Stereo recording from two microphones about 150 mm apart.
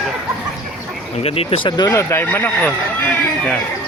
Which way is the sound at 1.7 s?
25° left (ahead or behind).